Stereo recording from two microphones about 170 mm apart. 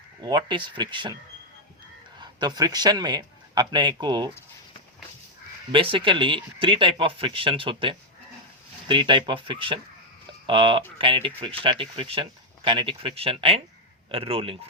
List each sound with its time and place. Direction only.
0.2 s speech: 25° right (ahead or behind)
2.1 s speech: 25° right (ahead or behind)
5.7 s speech: 30° right (ahead or behind)